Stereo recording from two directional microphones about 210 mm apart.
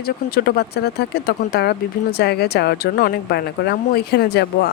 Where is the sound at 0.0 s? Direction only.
50° left (ahead or behind).